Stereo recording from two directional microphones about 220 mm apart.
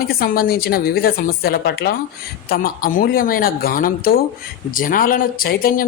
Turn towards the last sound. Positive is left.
turn(degrees=40)  # may be behind; listen again after turning